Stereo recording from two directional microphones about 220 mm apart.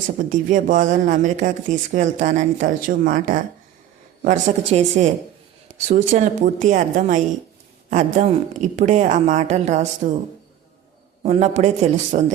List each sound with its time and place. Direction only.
0.2 s speech: 35° right (ahead or behind)
11.2 s a man's voice: 30° right (ahead or behind)